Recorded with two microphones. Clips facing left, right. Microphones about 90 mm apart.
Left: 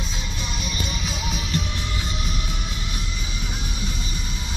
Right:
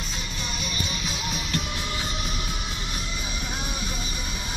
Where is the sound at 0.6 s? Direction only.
Centre (ahead or behind).